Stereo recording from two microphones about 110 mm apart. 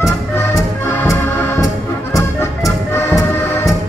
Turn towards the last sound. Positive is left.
turn(degrees=25)  # may be behind; listen again after turning